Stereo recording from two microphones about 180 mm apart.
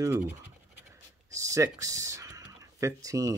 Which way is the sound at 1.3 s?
15° right (ahead or behind).